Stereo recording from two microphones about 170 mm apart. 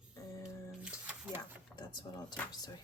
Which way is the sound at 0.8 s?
5° right (ahead or behind).